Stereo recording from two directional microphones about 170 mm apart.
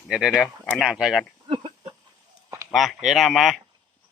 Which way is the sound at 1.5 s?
30° right (ahead or behind).